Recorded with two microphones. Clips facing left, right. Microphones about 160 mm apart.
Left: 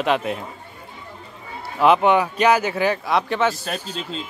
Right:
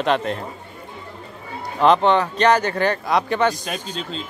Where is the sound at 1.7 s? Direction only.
5° left (ahead or behind).